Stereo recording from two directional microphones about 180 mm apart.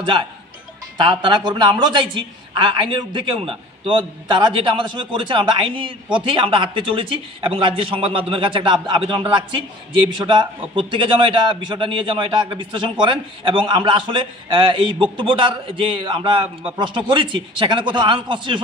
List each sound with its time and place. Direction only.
0.9 s a man's voice: 25° right (ahead or behind)